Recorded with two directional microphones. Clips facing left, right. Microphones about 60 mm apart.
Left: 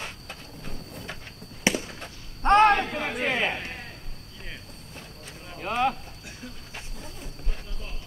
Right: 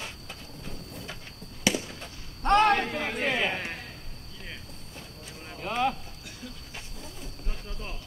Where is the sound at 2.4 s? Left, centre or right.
Left.